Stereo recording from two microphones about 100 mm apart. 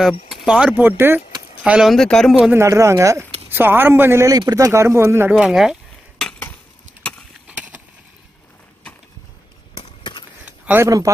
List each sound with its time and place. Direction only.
0.3 s speech: 10° right (ahead or behind)
1.6 s speech: 10° right (ahead or behind)
1.9 s speech: 5° left (ahead or behind)
2.5 s speech: 30° right (ahead or behind)
4.3 s speech: 40° right (ahead or behind); by 5.3 s 25° right (ahead or behind)
5.3 s cutlery: 5° right (ahead or behind)
7.4 s a sound: 15° right (ahead or behind)
10.4 s a sound: 15° right (ahead or behind)
10.8 s speech: 35° right (ahead or behind)